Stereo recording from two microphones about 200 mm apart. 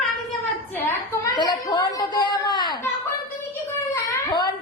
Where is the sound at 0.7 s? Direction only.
10° left (ahead or behind).